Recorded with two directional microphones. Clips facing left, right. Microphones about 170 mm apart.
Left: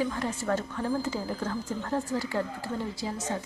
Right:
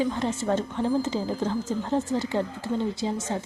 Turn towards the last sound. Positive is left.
turn(degrees=-25)  # may be behind; listen again after turning